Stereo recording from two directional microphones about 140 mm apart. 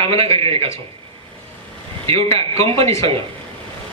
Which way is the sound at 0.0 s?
45° right (ahead or behind).